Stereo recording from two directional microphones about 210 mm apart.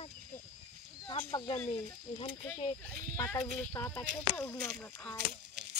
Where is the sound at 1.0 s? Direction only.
20° left (ahead or behind); by 5.1 s 5° left (ahead or behind).